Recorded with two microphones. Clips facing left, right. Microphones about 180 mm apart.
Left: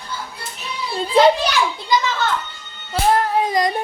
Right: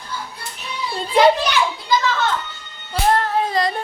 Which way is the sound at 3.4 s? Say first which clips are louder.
Left 1 dB; 15° left (ahead or behind).